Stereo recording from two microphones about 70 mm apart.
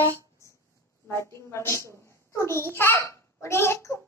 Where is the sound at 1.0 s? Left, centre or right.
Left.